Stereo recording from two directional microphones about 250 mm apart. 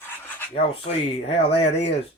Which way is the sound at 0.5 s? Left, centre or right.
Left.